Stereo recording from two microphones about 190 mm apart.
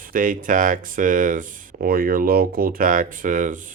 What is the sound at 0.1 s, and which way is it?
Speech, 45° right (ahead or behind).